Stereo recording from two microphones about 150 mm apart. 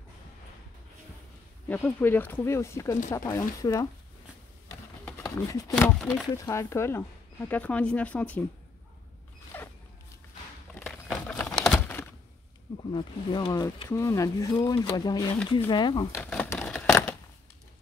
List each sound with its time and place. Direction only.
1.7 s speech: 10° left (ahead or behind)
5.2 s speech: 25° left (ahead or behind)
5.8 s speech: centre (ahead or behind)
6.2 s speech: 20° left (ahead or behind)
9.5 s zipper: 10° left (ahead or behind)
10.8 s a sound: 5° left (ahead or behind)
11.5 s crumpling: centre (ahead or behind)
12.9 s speech: 30° left (ahead or behind)
13.8 s speech: 15° left (ahead or behind)
16.2 s speech: centre (ahead or behind)
16.5 s a sound: 5° left (ahead or behind)